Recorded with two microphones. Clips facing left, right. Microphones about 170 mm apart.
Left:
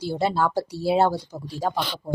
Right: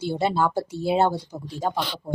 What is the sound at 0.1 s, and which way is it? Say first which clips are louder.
Speech: even; centre (ahead or behind).